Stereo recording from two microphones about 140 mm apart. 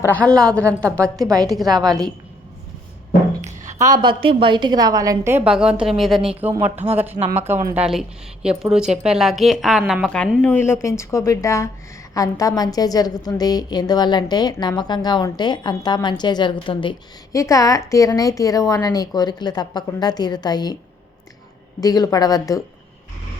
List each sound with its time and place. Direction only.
0.0 s a woman's voice: 10° left (ahead or behind)
3.4 s a sound: 60° right (ahead or behind)
3.8 s a woman's voice: 25° right (ahead or behind)
5.5 s a woman's voice: 5° right (ahead or behind)
6.4 s a woman's voice: 15° right (ahead or behind); by 10.2 s 5° left (ahead or behind)
10.4 s a woman's voice: 15° left (ahead or behind); by 16.9 s 35° left (ahead or behind)
17.3 s a woman's voice: 25° left (ahead or behind)
21.8 s a woman's voice: 25° left (ahead or behind)